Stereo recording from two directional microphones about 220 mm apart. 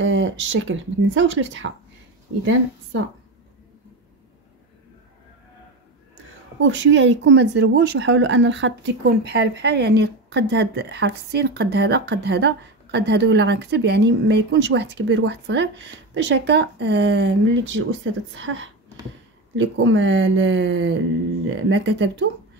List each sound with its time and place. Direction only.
0.0 s speech: 60° right (ahead or behind)
6.6 s speech: 55° right (ahead or behind)